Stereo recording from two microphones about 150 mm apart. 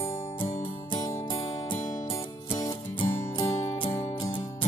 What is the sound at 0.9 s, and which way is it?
Music, 30° left (ahead or behind).